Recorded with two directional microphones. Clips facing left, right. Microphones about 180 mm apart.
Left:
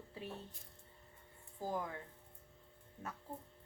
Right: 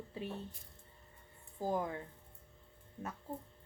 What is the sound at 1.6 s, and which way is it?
Speech, 25° right (ahead or behind).